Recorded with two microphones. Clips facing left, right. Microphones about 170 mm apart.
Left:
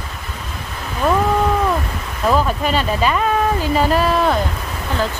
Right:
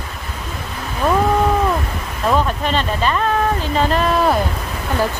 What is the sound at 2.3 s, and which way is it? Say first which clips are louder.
Speech: even; 10° left (ahead or behind).